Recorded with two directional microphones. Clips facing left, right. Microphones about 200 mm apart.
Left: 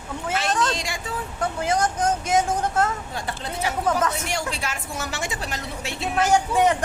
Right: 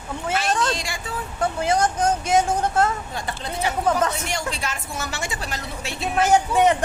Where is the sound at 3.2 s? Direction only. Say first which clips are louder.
Right 2 dB; 5° left (ahead or behind).